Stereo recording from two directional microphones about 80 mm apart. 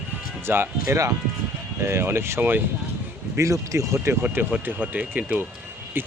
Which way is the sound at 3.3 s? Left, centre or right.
Right.